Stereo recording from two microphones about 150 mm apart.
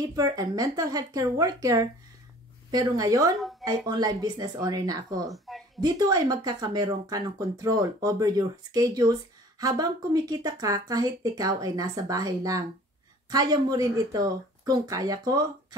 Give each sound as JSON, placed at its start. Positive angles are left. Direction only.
{"t": 0.0, "sound": "speech", "side_deg": -25}